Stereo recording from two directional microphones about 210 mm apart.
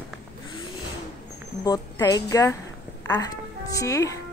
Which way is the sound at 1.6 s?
15° left (ahead or behind).